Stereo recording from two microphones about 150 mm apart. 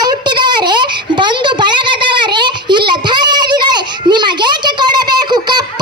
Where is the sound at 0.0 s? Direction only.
30° right (ahead or behind).